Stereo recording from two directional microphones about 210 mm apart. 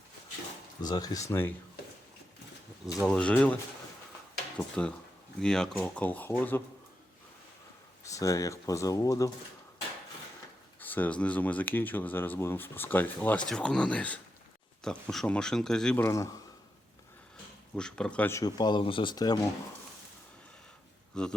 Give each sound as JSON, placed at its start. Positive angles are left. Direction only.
{"t": 0.8, "sound": "speech", "side_deg": 20}
{"t": 3.1, "sound": "speech", "side_deg": 5}
{"t": 8.0, "sound": "speech", "side_deg": 15}
{"t": 10.8, "sound": "speech", "side_deg": 10}
{"t": 17.7, "sound": "speech", "side_deg": 5}
{"t": 21.2, "sound": "speech", "side_deg": 5}